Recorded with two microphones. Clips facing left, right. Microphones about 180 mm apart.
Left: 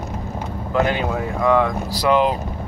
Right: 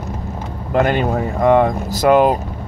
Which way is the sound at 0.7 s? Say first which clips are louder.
Right 4 dB; 55° right (ahead or behind).